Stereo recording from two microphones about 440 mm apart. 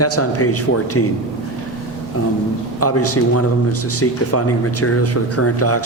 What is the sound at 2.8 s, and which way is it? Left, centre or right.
Speech, left.